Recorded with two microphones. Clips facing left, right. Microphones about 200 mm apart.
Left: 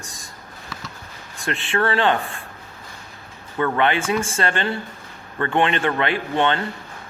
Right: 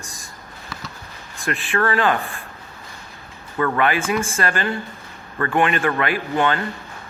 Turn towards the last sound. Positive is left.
turn(degrees=25)  # may be behind; listen again after turning